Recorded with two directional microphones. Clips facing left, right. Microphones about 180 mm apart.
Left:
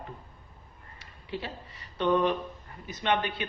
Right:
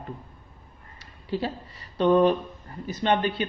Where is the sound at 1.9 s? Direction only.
35° right (ahead or behind).